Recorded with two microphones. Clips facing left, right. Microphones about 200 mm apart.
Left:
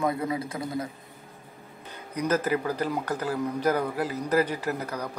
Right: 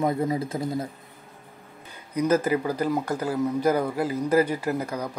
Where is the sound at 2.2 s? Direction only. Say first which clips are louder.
Right 3 dB; 10° right (ahead or behind).